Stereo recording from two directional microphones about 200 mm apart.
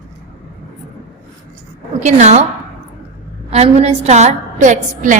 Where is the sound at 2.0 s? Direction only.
35° right (ahead or behind).